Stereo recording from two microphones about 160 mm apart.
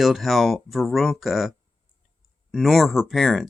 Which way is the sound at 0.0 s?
Centre (ahead or behind).